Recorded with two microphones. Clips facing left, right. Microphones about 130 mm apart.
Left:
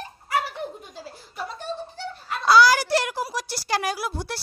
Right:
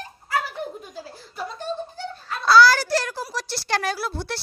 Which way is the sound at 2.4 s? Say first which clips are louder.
Right 1 dB; 15° left (ahead or behind).